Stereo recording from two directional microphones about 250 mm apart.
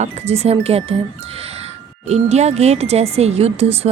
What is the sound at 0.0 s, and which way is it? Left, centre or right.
Speech, right.